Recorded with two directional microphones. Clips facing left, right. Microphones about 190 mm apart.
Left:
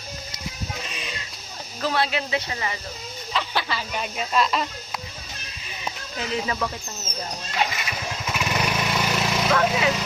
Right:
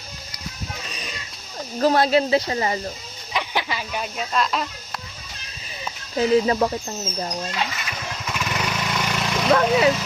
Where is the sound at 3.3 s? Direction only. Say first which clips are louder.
Right 1 dB; 15° right (ahead or behind).